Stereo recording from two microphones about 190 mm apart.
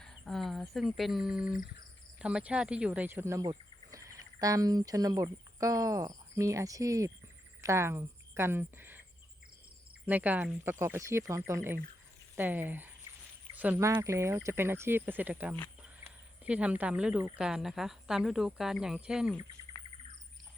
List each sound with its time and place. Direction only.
0.0 s a woman's voice: centre (ahead or behind)
10.1 s a woman's voice: 10° right (ahead or behind)